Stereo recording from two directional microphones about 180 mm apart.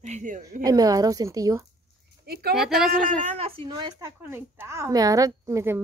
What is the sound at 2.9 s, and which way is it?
Speech, 50° right (ahead or behind).